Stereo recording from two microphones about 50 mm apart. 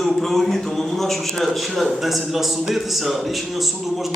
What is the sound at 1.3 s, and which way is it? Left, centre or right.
A man's voice, centre.